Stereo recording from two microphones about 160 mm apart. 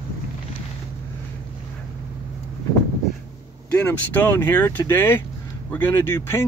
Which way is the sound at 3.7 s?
10° left (ahead or behind).